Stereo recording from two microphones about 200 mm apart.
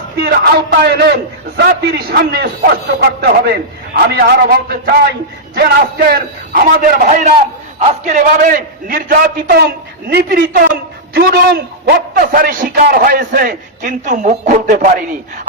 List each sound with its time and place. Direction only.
0.2 s a man's voice: 55° right (ahead or behind); by 14.9 s 40° right (ahead or behind)